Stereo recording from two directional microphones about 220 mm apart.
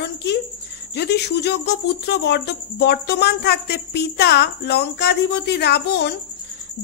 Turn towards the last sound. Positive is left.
turn(degrees=50)  # may be behind; listen again after turning